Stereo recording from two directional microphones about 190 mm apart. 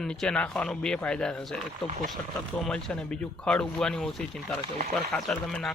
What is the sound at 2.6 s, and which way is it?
Speech, 5° left (ahead or behind).